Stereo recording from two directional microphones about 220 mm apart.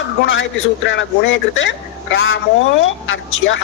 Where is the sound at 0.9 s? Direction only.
55° left (ahead or behind).